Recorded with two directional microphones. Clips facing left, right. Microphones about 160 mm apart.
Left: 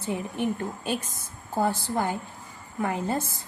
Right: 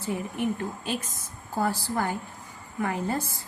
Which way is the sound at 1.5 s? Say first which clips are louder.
Left 2 dB; 20° left (ahead or behind).